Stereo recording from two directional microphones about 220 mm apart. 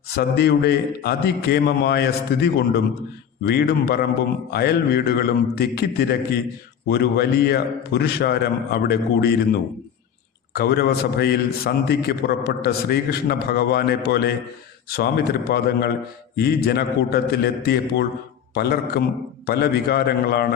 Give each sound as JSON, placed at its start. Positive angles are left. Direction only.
{"t": 0.2, "sound": "a man's voice", "side_deg": 45}